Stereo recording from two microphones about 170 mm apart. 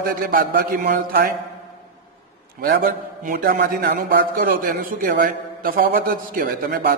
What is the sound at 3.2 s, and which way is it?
A man's voice, 60° right (ahead or behind).